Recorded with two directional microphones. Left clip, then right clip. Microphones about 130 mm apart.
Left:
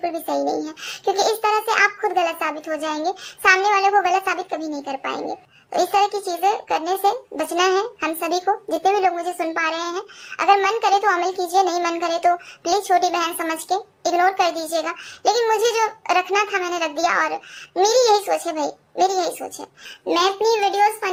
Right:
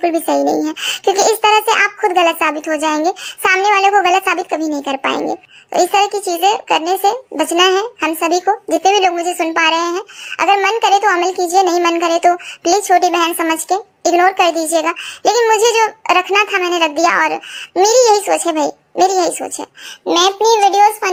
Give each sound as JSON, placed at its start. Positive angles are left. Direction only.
{"t": 0.0, "sound": "a child's voice", "side_deg": -45}